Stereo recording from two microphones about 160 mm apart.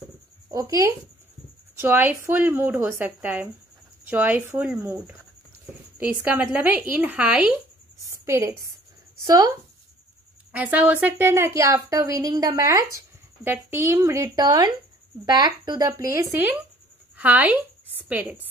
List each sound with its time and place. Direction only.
0.5 s speech: 25° right (ahead or behind)
1.8 s a woman's voice: 10° right (ahead or behind)
8.1 s a sound: 20° right (ahead or behind)
9.2 s speech: 25° right (ahead or behind)
10.5 s a woman's voice: 10° right (ahead or behind)